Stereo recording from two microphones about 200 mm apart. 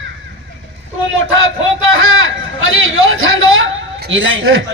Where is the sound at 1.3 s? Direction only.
75° right (ahead or behind).